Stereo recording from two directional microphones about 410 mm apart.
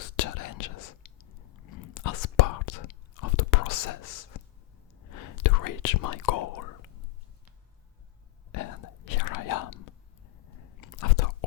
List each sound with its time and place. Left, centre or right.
0.0 s whispering: left
1.9 s whispering: left
5.1 s whispering: left
8.5 s whispering: left
10.8 s chewing: left